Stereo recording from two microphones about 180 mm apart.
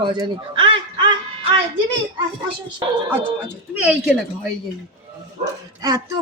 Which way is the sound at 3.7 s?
5° right (ahead or behind).